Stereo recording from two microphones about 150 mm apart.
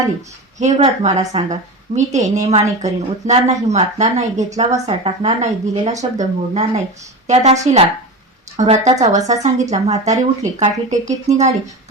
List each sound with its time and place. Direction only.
0.6 s speech: 50° right (ahead or behind)